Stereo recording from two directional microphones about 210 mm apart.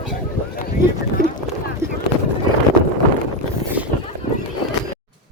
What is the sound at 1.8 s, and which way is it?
Boat, 10° right (ahead or behind).